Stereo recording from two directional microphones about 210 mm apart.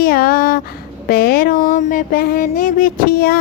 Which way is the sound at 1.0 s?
45° left (ahead or behind).